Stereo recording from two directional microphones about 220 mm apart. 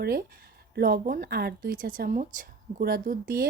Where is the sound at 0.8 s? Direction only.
40° right (ahead or behind).